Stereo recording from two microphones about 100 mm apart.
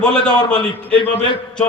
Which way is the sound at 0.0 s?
10° left (ahead or behind).